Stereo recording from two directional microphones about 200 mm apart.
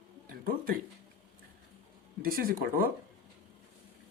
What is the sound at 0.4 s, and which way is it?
Music, 50° right (ahead or behind).